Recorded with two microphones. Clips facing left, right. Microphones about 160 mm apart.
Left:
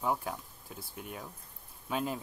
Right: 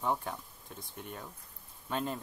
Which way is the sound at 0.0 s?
5° left (ahead or behind).